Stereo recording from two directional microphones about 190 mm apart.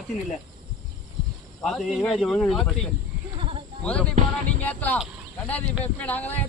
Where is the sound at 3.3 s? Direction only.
30° right (ahead or behind).